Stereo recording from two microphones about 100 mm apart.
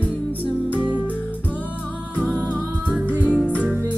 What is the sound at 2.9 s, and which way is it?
Music, 10° right (ahead or behind).